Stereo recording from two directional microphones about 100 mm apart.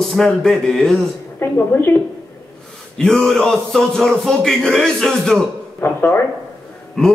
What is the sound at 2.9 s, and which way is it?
A man's voice, 5° left (ahead or behind).